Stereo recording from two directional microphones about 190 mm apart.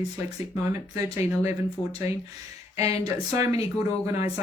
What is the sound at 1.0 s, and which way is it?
Speech, 15° right (ahead or behind).